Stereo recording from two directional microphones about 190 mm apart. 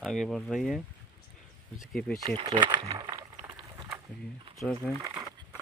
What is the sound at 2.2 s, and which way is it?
Speech, 25° right (ahead or behind).